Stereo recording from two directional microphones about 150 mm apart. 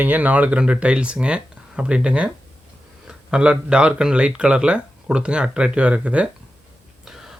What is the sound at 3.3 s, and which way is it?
Speech, 5° right (ahead or behind).